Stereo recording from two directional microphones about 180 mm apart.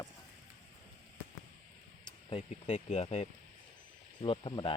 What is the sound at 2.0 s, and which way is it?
Speech, 30° left (ahead or behind).